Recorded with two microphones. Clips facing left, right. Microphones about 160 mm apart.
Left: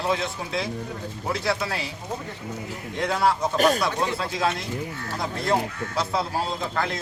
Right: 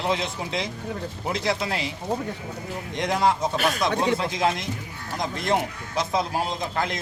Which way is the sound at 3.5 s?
40° left (ahead or behind).